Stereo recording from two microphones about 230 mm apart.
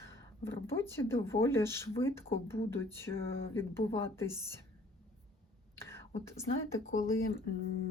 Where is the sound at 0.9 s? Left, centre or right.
Centre.